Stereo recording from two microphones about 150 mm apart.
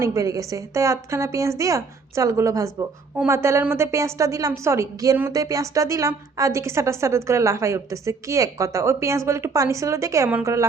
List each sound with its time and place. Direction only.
0.0 s a woman's voice: 20° right (ahead or behind)